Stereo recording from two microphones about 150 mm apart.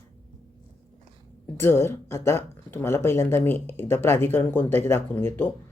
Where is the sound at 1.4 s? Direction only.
15° left (ahead or behind).